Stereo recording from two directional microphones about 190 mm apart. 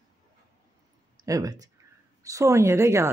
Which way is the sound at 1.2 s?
20° right (ahead or behind).